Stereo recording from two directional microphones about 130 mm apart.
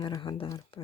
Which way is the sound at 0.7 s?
50° left (ahead or behind).